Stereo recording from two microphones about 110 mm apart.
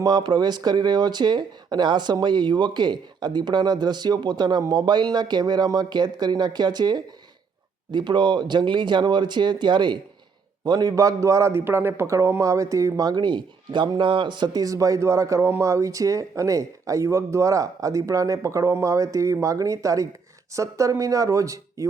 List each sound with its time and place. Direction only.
0.0 s a man's voice: 40° right (ahead or behind)